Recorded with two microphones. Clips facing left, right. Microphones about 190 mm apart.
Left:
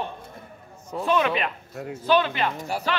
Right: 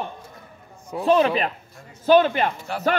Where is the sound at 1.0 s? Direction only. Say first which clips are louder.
Right 5 dB; 35° right (ahead or behind).